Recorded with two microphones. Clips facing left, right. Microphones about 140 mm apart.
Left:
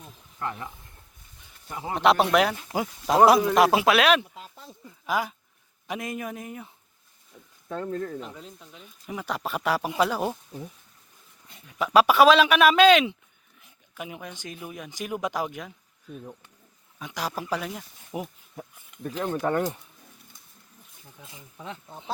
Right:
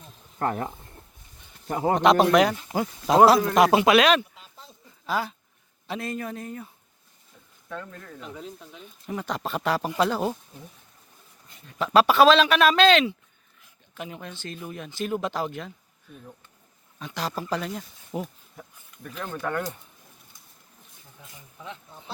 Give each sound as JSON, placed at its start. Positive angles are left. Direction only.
{"t": 0.3, "sound": "a man's voice", "side_deg": -50}
{"t": 2.0, "sound": "speech", "side_deg": 5}
{"t": 7.7, "sound": "speech", "side_deg": 35}
{"t": 8.4, "sound": "speech", "side_deg": 0}
{"t": 11.9, "sound": "speech", "side_deg": 10}
{"t": 17.0, "sound": "speech", "side_deg": 10}
{"t": 19.0, "sound": "speech", "side_deg": 25}